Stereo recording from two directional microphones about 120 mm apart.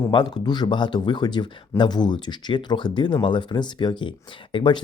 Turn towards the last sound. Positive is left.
turn(degrees=45)  # may be behind; listen again after turning